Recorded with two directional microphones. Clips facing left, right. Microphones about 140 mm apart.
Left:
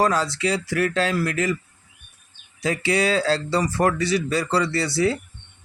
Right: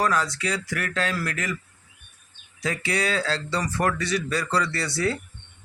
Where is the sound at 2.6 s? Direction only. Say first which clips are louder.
Left 5 dB; 30° left (ahead or behind).